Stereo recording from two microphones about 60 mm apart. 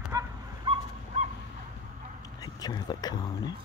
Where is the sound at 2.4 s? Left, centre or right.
Left.